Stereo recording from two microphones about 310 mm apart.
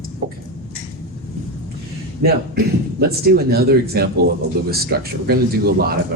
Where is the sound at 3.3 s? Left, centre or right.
Right.